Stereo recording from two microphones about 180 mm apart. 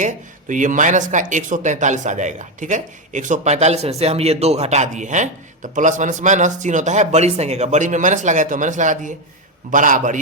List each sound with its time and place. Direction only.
0.0 s speech: 45° right (ahead or behind)